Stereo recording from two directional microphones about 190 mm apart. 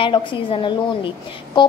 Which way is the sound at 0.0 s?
25° left (ahead or behind).